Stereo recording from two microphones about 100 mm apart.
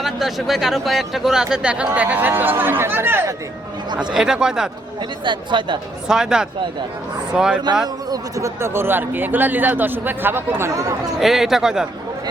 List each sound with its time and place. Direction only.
0.0 s speech: centre (ahead or behind); by 3.3 s 25° right (ahead or behind)
4.1 s speech: 5° right (ahead or behind)
5.2 s speech: 50° right (ahead or behind)
6.1 s speech: 5° right (ahead or behind)
8.1 s speech: 30° right (ahead or behind)
10.6 s speech: 30° right (ahead or behind)
11.2 s speech: 5° right (ahead or behind)